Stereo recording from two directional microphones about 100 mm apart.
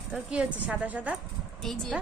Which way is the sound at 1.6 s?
5° left (ahead or behind).